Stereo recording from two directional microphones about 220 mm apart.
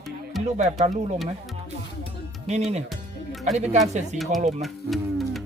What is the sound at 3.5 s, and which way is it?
Speech, 30° right (ahead or behind).